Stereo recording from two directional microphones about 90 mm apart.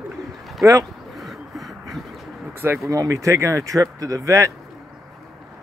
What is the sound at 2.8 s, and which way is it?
Speech, 40° right (ahead or behind).